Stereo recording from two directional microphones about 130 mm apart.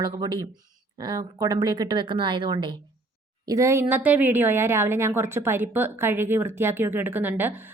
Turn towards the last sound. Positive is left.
turn(degrees=-15)  # may be behind; listen again after turning